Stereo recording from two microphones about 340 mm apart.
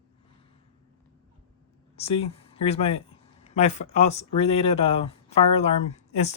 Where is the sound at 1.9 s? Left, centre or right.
Centre.